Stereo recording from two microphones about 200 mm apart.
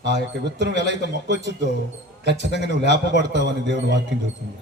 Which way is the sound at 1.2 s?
60° right (ahead or behind).